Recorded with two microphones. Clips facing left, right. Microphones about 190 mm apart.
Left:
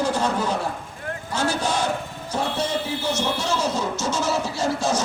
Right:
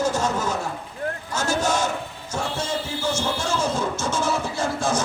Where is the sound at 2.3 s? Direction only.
50° right (ahead or behind).